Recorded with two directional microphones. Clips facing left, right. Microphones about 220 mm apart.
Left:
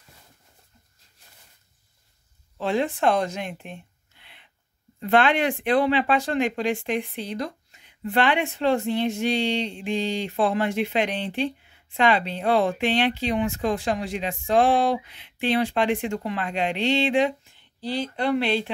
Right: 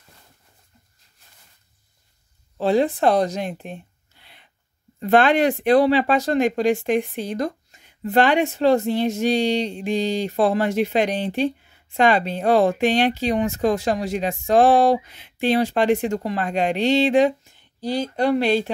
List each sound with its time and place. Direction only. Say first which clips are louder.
2.5 s speech: right 6 dB; 35° right (ahead or behind)